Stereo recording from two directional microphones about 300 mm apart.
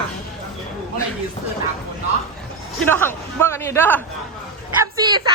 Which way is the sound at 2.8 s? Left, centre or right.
Centre.